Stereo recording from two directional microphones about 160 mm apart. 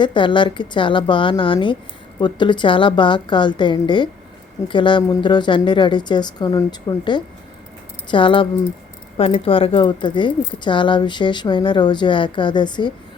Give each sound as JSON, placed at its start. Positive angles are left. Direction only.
{"t": 0.0, "sound": "a woman's voice", "side_deg": 30}